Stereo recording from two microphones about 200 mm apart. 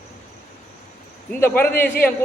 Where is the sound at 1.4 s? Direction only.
10° left (ahead or behind).